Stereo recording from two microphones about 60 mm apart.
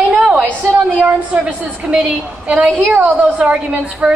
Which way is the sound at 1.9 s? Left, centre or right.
Right.